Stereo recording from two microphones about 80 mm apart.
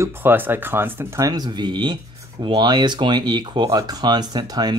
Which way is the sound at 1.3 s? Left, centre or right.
Right.